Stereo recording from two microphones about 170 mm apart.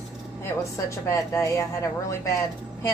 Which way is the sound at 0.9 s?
15° left (ahead or behind).